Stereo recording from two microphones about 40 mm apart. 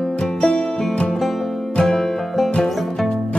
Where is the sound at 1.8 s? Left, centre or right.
Centre.